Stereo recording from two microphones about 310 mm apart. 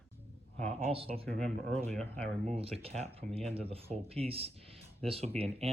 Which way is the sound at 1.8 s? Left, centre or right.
Centre.